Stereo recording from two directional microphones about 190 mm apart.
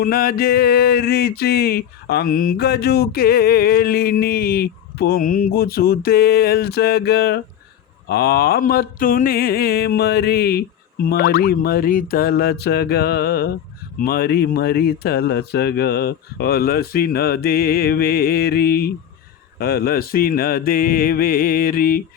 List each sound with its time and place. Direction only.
0.0 s speech: 50° left (ahead or behind)